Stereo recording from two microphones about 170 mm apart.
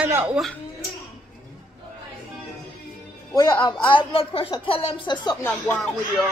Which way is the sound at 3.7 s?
30° left (ahead or behind).